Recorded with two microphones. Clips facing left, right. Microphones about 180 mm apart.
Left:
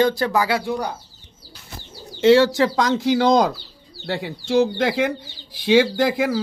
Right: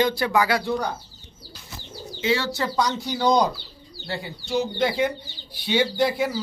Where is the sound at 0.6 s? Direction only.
15° left (ahead or behind).